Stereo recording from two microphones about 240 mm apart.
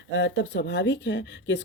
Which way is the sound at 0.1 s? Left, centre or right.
Left.